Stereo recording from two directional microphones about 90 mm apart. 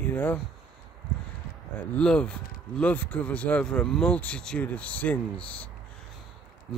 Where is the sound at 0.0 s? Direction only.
20° left (ahead or behind).